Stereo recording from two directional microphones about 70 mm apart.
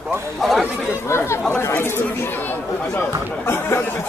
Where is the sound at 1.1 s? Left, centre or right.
Left.